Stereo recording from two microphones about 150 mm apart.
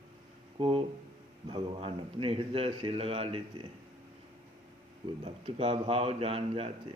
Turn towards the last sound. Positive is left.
turn(degrees=-40)  # may be behind; listen again after turning